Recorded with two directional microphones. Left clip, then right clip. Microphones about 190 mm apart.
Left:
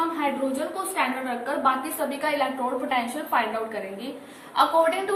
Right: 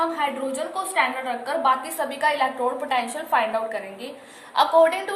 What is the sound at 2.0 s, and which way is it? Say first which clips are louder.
A woman's voice: right 4 dB; 45° right (ahead or behind).